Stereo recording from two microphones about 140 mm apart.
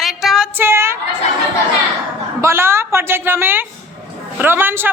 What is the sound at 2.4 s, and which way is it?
A woman's voice, 20° right (ahead or behind).